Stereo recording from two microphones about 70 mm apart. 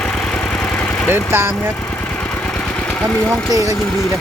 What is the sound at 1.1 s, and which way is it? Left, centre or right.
Speech, right.